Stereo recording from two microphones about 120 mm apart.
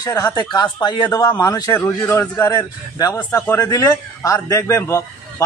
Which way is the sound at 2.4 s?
30° left (ahead or behind).